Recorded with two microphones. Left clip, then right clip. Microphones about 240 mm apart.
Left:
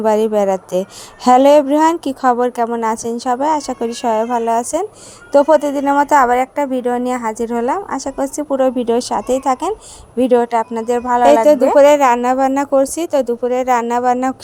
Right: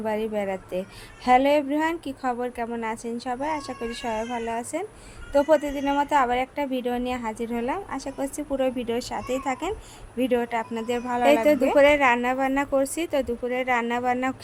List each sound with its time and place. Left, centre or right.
0.0 s speech: left